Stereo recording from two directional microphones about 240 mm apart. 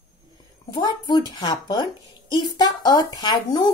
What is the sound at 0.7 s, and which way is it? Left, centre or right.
Speech, centre.